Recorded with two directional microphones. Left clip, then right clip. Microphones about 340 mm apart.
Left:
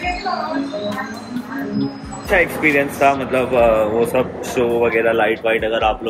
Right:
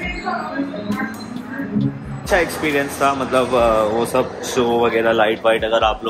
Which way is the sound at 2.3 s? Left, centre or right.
Centre.